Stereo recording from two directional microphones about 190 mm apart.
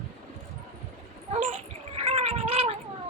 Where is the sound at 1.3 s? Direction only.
40° right (ahead or behind).